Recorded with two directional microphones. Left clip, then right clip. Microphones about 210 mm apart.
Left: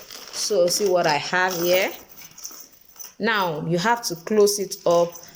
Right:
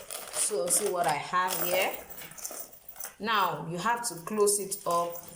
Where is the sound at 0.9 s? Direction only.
40° left (ahead or behind).